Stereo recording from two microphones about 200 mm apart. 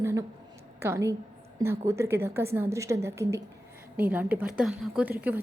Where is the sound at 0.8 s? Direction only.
15° right (ahead or behind).